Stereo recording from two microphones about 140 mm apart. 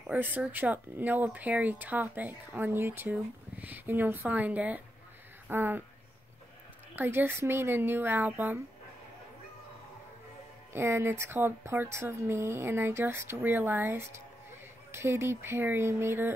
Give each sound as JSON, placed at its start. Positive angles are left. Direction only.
{"t": 0.0, "sound": "speech", "side_deg": -10}
{"t": 7.0, "sound": "speech", "side_deg": -15}
{"t": 10.7, "sound": "speech", "side_deg": -20}